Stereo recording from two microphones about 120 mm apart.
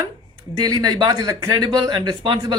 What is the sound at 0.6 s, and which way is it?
Speech, 35° right (ahead or behind).